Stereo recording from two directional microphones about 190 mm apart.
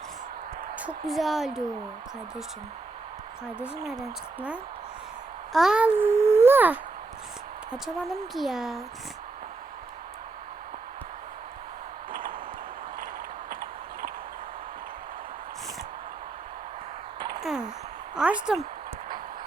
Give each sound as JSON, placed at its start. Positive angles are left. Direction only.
{"t": 0.8, "sound": "speech", "side_deg": -5}
{"t": 5.5, "sound": "a child's voice", "side_deg": -5}
{"t": 7.7, "sound": "speech", "side_deg": 0}
{"t": 13.5, "sound": "clip-clop", "side_deg": -50}
{"t": 18.1, "sound": "speech", "side_deg": -5}